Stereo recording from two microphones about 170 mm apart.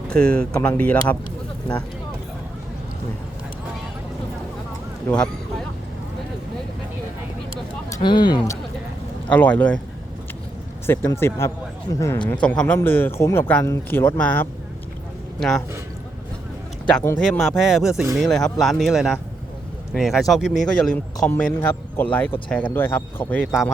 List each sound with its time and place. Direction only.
0.1 s speech: 5° left (ahead or behind)
5.0 s speech: 5° left (ahead or behind)
8.0 s speech: 25° left (ahead or behind)
9.3 s speech: 10° left (ahead or behind)
10.8 s speech: 15° left (ahead or behind)
17.2 s speech: 5° left (ahead or behind)
23.5 s speech: centre (ahead or behind)